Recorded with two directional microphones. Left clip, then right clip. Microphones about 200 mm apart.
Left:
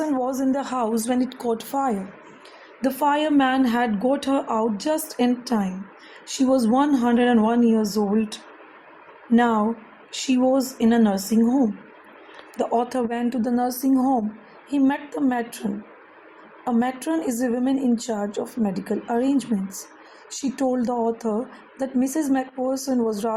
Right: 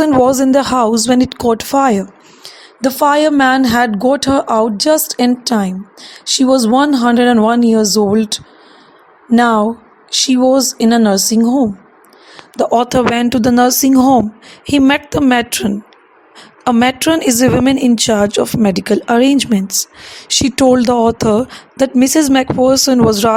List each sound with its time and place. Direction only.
0.0 s a sound: 50° right (ahead or behind)
0.6 s speech: 55° right (ahead or behind); by 1.4 s 80° right
1.4 s speech: 45° right (ahead or behind)
12.5 s speech: 50° right (ahead or behind)
16.6 s speech: 45° right (ahead or behind)